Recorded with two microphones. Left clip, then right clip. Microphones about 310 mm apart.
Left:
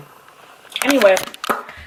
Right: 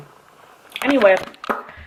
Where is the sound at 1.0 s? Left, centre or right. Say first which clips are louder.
Even; centre.